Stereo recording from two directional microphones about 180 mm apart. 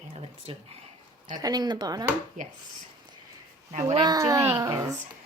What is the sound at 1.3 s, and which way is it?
Speech, 20° right (ahead or behind).